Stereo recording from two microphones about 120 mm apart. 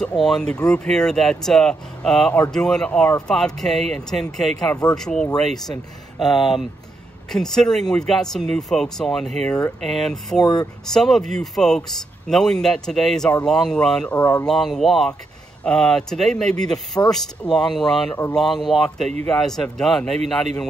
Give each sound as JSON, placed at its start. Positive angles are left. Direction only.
{"t": 0.2, "sound": "a man's voice", "side_deg": 5}
{"t": 10.4, "sound": "speech", "side_deg": 30}
{"t": 10.9, "sound": "a man's voice", "side_deg": 5}
{"t": 14.1, "sound": "speech", "side_deg": 20}
{"t": 14.4, "sound": "a man's voice", "side_deg": 0}